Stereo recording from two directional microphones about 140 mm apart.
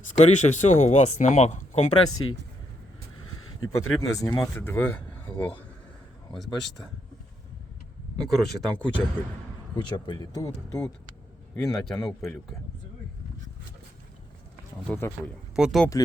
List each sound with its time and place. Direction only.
0.1 s speech: 55° left (ahead or behind)
3.6 s speech: 25° left (ahead or behind)
6.3 s speech: centre (ahead or behind)
8.2 s speech: centre (ahead or behind)
9.7 s speech: 30° left (ahead or behind)
11.5 s speech: 5° left (ahead or behind)
14.9 s speech: 10° left (ahead or behind)
15.5 s speech: 5° right (ahead or behind)